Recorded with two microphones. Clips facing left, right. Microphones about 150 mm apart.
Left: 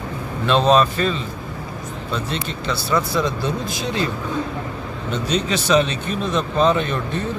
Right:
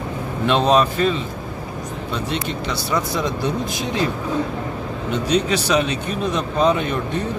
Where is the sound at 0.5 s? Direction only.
15° right (ahead or behind).